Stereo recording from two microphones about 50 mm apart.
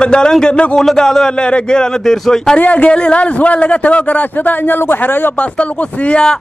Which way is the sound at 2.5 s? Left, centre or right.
Left.